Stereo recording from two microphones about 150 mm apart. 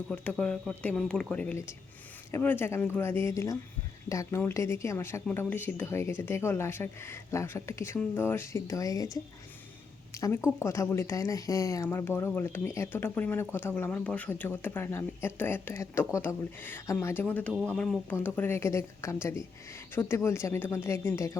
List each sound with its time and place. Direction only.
0.1 s speech: 5° left (ahead or behind); by 9.0 s 25° left (ahead or behind)
10.2 s speech: 20° left (ahead or behind)